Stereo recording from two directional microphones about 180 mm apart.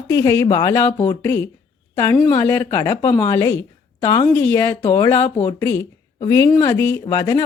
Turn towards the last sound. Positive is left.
turn(degrees=15)  # may be behind; listen again after turning